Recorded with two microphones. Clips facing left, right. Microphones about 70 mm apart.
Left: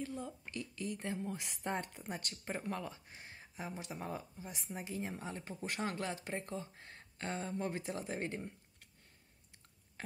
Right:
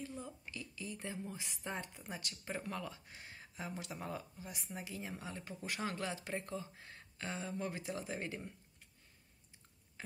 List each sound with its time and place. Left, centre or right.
0.2 s a woman's voice: left
2.6 s speech: left